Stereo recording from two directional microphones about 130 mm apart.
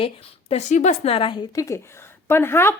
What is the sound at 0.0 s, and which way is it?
A woman's voice, 50° left (ahead or behind).